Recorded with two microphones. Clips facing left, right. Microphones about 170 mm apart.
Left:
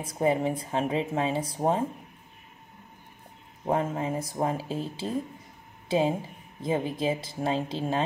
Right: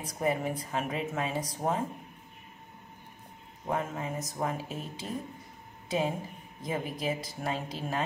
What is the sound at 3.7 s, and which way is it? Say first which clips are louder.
Speech: left 6 dB; 30° left (ahead or behind).